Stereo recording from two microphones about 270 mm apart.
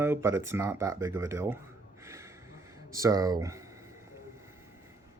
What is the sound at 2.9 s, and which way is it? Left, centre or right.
Speech, centre.